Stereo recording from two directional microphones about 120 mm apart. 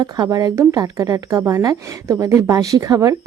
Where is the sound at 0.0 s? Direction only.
30° right (ahead or behind).